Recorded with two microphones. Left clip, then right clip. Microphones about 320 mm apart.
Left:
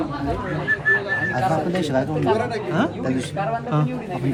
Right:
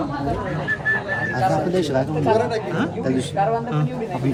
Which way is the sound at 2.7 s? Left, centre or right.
Centre.